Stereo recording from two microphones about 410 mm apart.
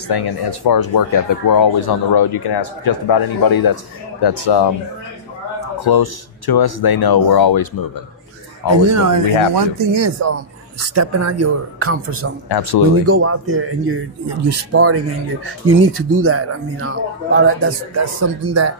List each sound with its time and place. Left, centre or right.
0.1 s speech: left
4.2 s speech: left
5.8 s speech: left
8.9 s a man's voice: right
12.4 s speech: left
13.0 s a man's voice: right